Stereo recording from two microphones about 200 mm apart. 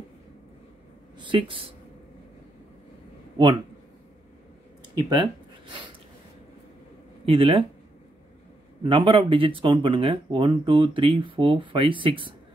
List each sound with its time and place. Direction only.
1.1 s speech: 25° right (ahead or behind)
4.9 s a sound: 25° right (ahead or behind)
7.2 s speech: 25° right (ahead or behind)
8.8 s speech: 25° right (ahead or behind)